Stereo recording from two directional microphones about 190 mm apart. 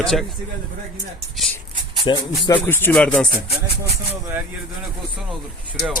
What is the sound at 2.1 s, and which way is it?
Speech, 25° left (ahead or behind).